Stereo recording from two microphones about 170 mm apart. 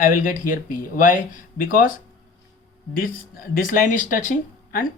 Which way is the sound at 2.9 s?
55° left (ahead or behind).